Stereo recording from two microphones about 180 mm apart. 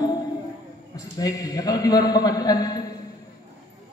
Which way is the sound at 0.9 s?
20° left (ahead or behind).